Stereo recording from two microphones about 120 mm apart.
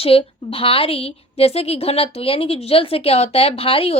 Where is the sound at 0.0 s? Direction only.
55° left (ahead or behind).